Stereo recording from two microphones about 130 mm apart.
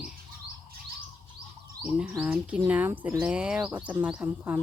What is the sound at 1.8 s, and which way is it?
Speech, 10° right (ahead or behind).